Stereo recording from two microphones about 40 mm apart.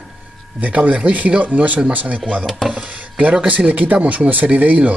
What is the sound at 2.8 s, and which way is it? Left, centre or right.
Speech, right.